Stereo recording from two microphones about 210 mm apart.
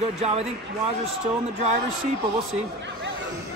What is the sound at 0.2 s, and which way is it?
Speech, 30° right (ahead or behind).